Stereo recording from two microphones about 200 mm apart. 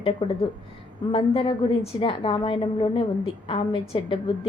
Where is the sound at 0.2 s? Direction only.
25° left (ahead or behind).